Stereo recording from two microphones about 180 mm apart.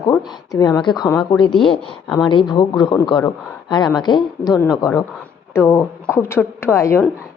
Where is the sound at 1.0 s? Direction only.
10° left (ahead or behind).